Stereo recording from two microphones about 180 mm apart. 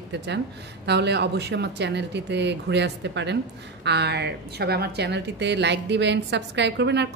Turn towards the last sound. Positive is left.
turn(degrees=-70)  # may be behind; listen again after turning